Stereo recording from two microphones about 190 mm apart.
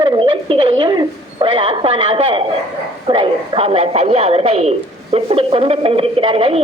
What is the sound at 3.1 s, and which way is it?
A woman's voice, 25° right (ahead or behind).